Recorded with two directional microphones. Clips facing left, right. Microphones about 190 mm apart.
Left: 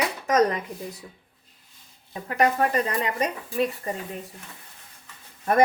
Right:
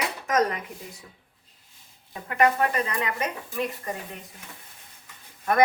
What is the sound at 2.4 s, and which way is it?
Speech, 35° left (ahead or behind).